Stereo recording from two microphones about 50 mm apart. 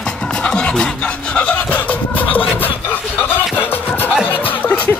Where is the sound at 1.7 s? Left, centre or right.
Left.